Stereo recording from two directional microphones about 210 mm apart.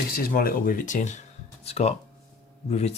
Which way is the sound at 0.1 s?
45° left (ahead or behind).